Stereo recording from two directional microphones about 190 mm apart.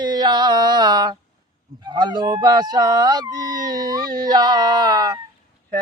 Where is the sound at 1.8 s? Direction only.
20° right (ahead or behind).